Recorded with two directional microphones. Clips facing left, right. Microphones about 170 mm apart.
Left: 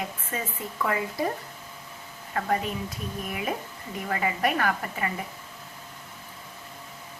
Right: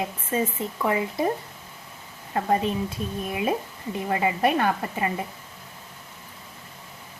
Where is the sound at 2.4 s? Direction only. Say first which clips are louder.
Right 4 dB; 25° right (ahead or behind).